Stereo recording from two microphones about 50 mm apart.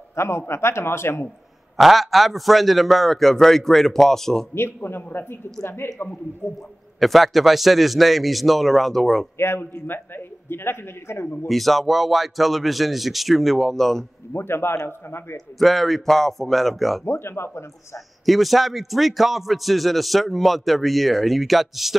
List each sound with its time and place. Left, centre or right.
0.1 s a man's voice: left
1.8 s a man's voice: centre
4.8 s a man's voice: left
7.0 s a man's voice: centre
9.4 s a man's voice: left
11.4 s a man's voice: centre
14.3 s a man's voice: left
15.6 s a man's voice: centre
17.0 s speech: left
18.2 s a man's voice: centre